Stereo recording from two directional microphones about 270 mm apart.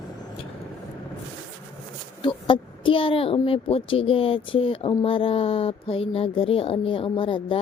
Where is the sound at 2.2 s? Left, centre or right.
Centre.